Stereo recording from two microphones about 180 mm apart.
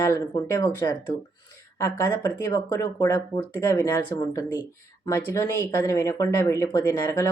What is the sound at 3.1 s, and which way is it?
Speech, 10° left (ahead or behind).